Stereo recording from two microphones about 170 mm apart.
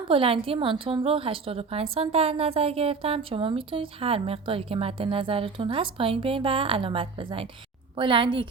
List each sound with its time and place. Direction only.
0.1 s a woman's voice: 30° right (ahead or behind)